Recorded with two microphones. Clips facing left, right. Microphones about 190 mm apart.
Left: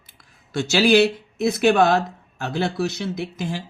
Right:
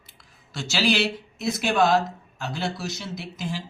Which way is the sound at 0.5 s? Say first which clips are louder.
Left 8 dB; 55° left (ahead or behind).